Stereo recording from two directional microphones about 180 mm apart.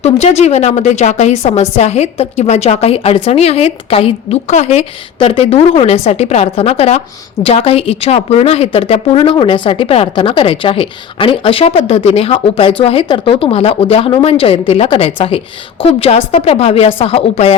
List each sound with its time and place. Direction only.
0.0 s a woman's voice: 40° left (ahead or behind)